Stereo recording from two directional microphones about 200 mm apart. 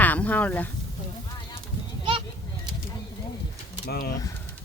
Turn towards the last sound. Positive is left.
turn(degrees=50)  # may be behind; listen again after turning